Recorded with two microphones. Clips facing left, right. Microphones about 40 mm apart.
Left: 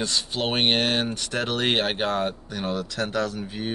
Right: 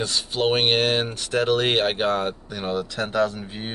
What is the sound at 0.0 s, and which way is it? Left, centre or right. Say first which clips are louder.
Speech: right 3 dB; centre.